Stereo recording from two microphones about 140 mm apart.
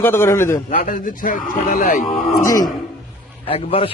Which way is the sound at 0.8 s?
75° left (ahead or behind).